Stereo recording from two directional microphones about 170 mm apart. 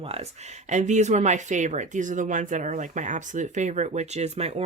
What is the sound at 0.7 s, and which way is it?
Speech, 45° right (ahead or behind).